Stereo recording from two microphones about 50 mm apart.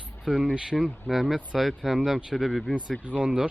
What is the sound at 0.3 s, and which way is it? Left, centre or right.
A man's voice, centre.